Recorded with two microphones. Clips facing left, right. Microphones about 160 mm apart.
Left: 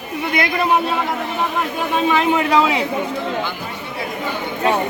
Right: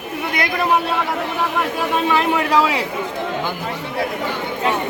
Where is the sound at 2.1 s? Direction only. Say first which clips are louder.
Left 2 dB; centre (ahead or behind).